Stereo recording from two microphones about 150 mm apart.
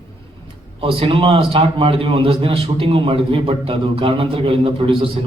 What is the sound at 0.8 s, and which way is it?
A man's voice, 40° right (ahead or behind).